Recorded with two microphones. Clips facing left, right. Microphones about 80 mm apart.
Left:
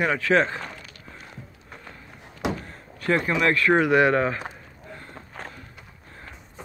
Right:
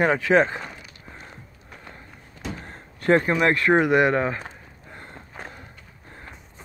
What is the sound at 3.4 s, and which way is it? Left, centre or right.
Speech, right.